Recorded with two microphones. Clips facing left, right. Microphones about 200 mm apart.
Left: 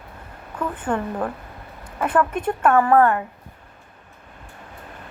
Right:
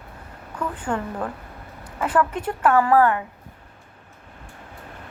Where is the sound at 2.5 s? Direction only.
25° left (ahead or behind).